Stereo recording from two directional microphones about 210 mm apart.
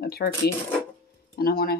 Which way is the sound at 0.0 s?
50° left (ahead or behind).